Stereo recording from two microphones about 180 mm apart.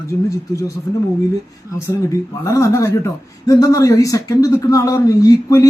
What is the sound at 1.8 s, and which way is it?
Speech, 15° left (ahead or behind).